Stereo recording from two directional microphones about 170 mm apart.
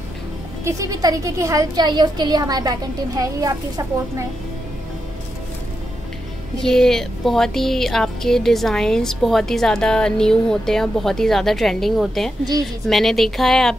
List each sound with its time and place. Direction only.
0.7 s a woman's voice: 20° right (ahead or behind)
6.6 s speech: 5° left (ahead or behind)